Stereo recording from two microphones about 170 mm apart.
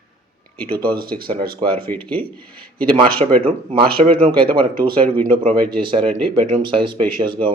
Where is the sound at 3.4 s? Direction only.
30° right (ahead or behind).